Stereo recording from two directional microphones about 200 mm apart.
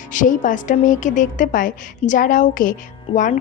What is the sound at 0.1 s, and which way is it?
A woman's voice, 40° left (ahead or behind).